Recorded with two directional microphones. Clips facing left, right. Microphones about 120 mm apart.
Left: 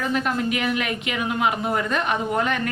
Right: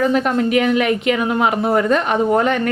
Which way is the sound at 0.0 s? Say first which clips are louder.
Right 7 dB; 35° right (ahead or behind).